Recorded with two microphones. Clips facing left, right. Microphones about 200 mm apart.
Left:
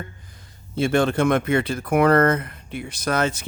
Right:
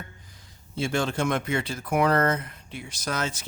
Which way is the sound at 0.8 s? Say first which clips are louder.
Left 7 dB; 60° left (ahead or behind).